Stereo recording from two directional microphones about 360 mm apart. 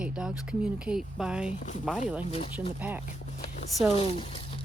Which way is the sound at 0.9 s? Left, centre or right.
Centre.